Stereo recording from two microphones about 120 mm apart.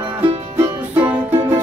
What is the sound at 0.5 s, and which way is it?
Music, 20° right (ahead or behind).